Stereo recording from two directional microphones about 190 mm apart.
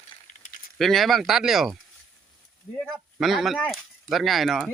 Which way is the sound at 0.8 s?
Centre (ahead or behind).